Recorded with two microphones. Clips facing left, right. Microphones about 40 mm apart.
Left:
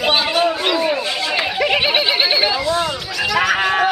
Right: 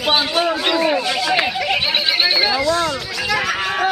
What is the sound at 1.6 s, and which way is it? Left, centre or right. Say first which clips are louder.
Neigh: left 3 dB; centre.